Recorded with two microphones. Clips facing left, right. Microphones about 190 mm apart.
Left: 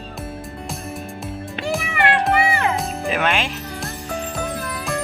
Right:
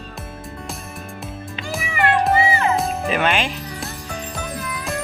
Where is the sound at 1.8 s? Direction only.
70° left (ahead or behind).